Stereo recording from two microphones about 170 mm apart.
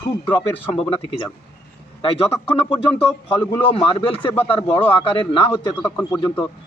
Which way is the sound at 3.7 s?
30° left (ahead or behind).